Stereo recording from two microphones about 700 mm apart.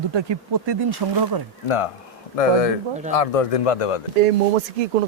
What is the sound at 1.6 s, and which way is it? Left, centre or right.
Speech, left.